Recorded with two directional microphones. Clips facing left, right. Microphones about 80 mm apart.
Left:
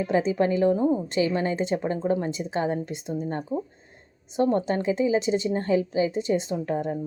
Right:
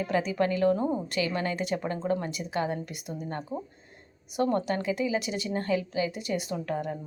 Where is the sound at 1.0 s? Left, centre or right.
Left.